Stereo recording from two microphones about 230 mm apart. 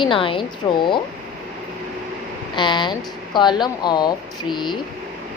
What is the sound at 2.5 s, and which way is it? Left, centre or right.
Speech, centre.